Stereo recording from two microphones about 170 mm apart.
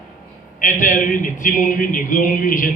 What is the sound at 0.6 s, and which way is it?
A man's voice, 50° left (ahead or behind).